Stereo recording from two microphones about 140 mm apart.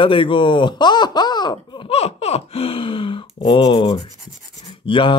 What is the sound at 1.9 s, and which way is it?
Speech, 45° left (ahead or behind).